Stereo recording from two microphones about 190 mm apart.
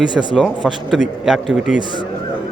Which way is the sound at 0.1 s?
25° right (ahead or behind).